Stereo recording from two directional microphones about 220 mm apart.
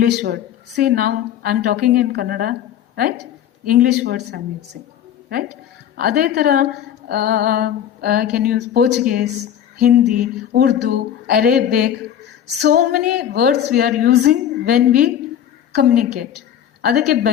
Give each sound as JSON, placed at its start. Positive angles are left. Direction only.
{"t": 0.0, "sound": "a woman's voice", "side_deg": -45}
{"t": 6.0, "sound": "a woman's voice", "side_deg": -45}